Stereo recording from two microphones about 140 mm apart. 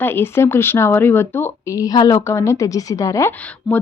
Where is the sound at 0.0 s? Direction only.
15° left (ahead or behind).